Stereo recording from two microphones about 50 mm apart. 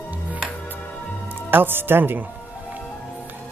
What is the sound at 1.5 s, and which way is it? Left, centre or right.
Speech, right.